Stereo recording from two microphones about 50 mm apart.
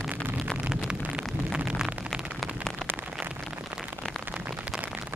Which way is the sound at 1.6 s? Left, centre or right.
Centre.